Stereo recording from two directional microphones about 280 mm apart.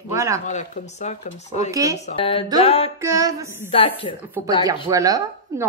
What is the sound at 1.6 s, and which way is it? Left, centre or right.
Speech, centre.